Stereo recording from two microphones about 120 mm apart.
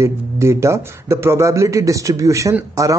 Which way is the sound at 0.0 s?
25° right (ahead or behind).